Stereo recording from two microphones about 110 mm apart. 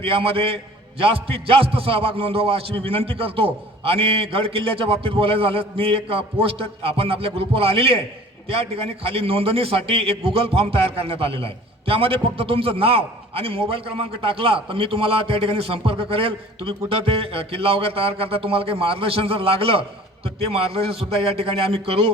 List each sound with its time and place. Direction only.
0.0 s a man's voice: 55° right (ahead or behind)
21.7 s a man's voice: 60° right (ahead or behind)